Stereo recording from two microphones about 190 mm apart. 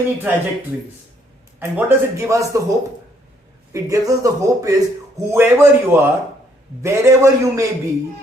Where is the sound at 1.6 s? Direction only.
10° right (ahead or behind).